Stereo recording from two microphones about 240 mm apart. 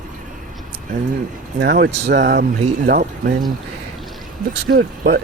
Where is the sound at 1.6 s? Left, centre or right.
Right.